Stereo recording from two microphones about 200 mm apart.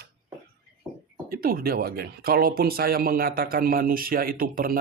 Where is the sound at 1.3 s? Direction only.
45° right (ahead or behind).